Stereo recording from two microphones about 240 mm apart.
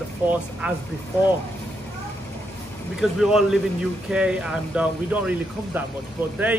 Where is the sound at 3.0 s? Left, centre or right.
Centre.